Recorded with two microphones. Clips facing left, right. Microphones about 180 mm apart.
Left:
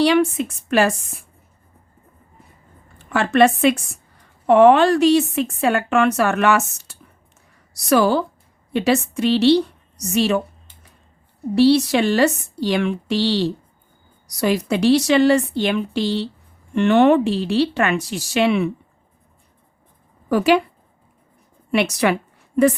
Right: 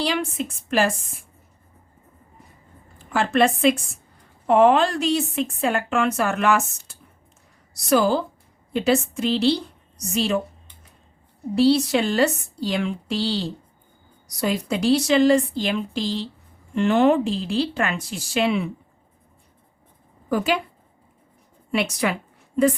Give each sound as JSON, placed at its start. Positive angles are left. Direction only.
{"t": 0.0, "sound": "a woman's voice", "side_deg": 70}
{"t": 3.1, "sound": "a woman's voice", "side_deg": 70}
{"t": 11.5, "sound": "a woman's voice", "side_deg": 70}
{"t": 20.3, "sound": "a woman's voice", "side_deg": 75}
{"t": 21.7, "sound": "a woman's voice", "side_deg": 70}